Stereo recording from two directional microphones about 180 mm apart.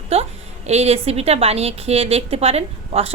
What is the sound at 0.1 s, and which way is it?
A woman's voice, 35° right (ahead or behind).